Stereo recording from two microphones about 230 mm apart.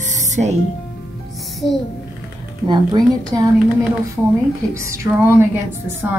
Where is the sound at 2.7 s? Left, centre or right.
Centre.